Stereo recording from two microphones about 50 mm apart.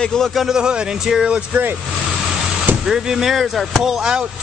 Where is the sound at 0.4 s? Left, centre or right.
Centre.